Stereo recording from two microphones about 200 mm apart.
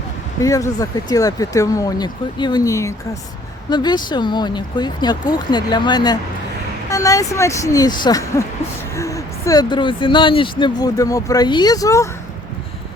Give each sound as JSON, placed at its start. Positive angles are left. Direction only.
{"t": 0.4, "sound": "speech", "side_deg": 15}